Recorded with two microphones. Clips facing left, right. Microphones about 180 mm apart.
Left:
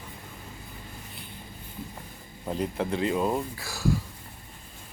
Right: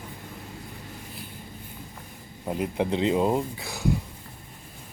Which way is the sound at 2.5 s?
15° right (ahead or behind).